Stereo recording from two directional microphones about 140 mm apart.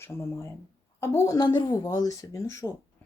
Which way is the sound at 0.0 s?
20° left (ahead or behind).